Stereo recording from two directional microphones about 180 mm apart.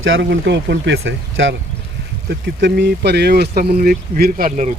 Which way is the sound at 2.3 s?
70° right (ahead or behind).